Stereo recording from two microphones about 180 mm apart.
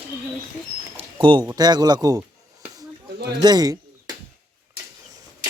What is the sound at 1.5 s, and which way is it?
Speech, 20° right (ahead or behind).